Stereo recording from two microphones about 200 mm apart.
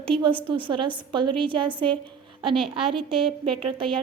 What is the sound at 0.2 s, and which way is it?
A woman's voice, 25° right (ahead or behind).